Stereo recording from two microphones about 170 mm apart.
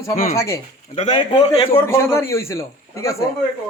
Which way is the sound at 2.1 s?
15° left (ahead or behind).